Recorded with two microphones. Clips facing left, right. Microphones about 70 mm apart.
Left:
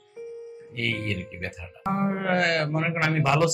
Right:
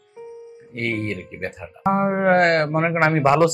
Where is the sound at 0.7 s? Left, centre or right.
Right.